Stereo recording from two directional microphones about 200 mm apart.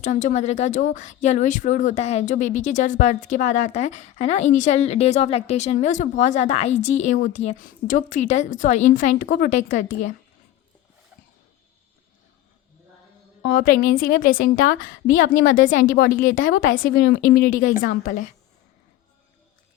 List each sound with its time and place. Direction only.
0.0 s speech: 35° left (ahead or behind)
13.4 s a woman's voice: 55° left (ahead or behind)